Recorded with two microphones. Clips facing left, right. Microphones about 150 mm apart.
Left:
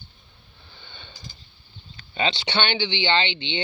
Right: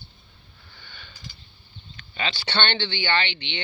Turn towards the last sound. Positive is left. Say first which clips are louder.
# left 3 dB
turn(degrees=25)  # may be behind; listen again after turning